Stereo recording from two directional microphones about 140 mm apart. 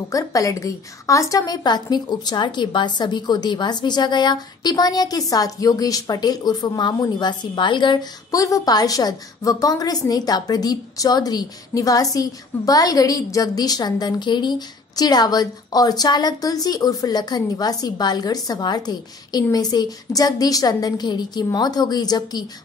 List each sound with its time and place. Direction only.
0.1 s a woman's voice: 25° left (ahead or behind)